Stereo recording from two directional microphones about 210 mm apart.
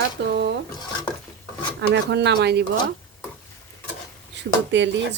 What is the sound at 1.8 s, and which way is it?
Speech, 55° right (ahead or behind).